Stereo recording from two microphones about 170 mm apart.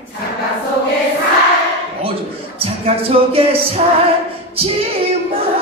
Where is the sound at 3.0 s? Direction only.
35° right (ahead or behind).